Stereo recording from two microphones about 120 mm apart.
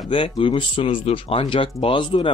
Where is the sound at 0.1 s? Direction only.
45° left (ahead or behind).